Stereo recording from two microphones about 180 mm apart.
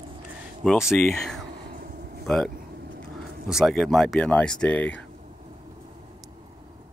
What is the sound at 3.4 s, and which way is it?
Speech, centre (ahead or behind).